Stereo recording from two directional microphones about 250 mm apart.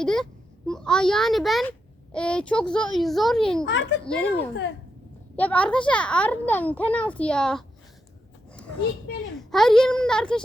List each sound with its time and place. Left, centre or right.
0.0 s a child's voice: centre
3.7 s a child's voice: left
4.0 s a child's voice: centre
9.5 s a child's voice: centre